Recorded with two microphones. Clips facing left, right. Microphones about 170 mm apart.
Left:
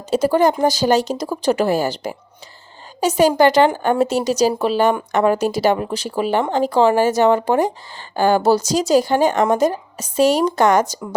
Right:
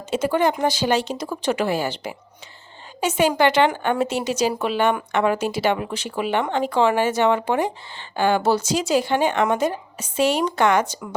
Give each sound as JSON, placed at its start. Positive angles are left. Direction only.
{"t": 0.1, "sound": "speech", "side_deg": 40}